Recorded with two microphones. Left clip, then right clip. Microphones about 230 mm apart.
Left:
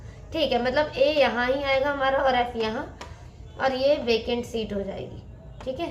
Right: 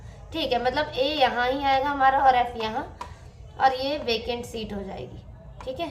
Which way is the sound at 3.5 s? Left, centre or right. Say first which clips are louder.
Left 1 dB; right.